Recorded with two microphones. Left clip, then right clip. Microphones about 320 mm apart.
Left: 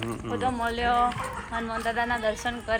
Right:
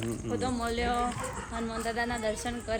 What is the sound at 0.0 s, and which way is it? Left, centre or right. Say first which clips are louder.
Speech: left 4 dB; centre.